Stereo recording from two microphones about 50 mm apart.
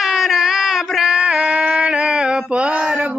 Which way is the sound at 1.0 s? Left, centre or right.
Centre.